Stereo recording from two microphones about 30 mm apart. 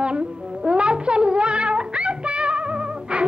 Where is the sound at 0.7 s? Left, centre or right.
Right.